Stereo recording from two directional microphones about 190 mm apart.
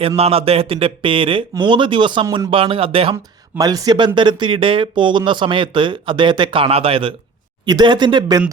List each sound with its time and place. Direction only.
0.2 s speech: 30° right (ahead or behind)